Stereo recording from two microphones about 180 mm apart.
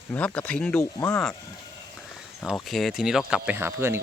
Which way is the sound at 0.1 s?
10° left (ahead or behind).